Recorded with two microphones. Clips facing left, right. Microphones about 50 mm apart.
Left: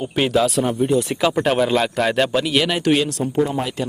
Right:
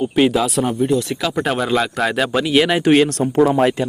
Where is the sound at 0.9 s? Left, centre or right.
Left.